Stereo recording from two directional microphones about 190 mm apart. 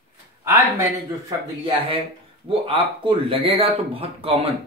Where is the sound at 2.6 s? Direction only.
30° right (ahead or behind).